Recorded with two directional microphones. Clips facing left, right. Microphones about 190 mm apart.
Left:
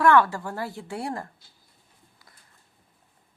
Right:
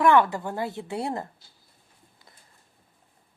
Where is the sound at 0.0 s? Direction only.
20° right (ahead or behind).